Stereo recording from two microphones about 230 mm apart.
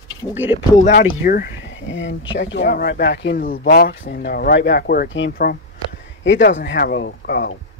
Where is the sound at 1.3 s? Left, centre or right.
Left.